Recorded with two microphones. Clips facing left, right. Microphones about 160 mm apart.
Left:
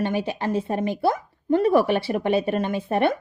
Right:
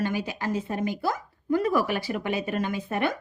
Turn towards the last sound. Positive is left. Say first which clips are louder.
# left 6 dB
turn(degrees=30)  # may be behind; listen again after turning